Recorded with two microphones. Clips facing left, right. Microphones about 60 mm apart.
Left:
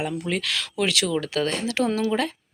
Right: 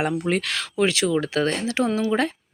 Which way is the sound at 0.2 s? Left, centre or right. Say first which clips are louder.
Right 3 dB; right.